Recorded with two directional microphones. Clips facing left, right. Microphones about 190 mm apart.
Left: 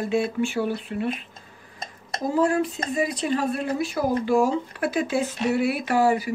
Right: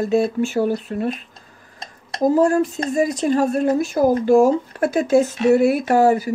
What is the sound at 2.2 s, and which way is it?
Speech, 45° right (ahead or behind).